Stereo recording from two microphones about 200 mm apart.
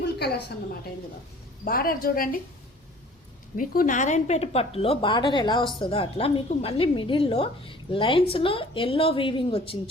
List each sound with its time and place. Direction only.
0.0 s a woman's voice: 55° left (ahead or behind)
3.6 s a woman's voice: 45° left (ahead or behind); by 9.7 s 25° left (ahead or behind)